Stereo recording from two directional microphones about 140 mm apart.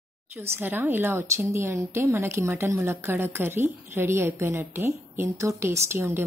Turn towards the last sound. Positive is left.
turn(degrees=-20)  # may be behind; listen again after turning